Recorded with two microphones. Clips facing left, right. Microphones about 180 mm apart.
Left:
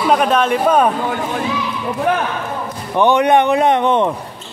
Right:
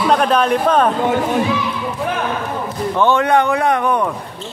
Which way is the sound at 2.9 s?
15° left (ahead or behind).